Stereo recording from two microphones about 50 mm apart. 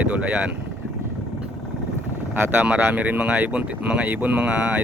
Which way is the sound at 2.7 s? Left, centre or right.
Right.